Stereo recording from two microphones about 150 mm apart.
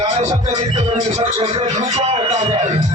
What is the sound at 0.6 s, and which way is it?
Speech, 50° right (ahead or behind).